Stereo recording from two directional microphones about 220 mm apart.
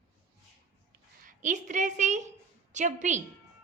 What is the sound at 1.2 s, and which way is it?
A woman's voice, 35° right (ahead or behind).